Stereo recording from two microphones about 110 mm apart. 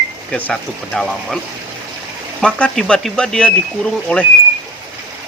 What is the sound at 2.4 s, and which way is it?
Speech, 10° left (ahead or behind).